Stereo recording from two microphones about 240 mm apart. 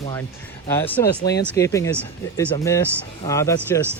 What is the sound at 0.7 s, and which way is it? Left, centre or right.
Speech, centre.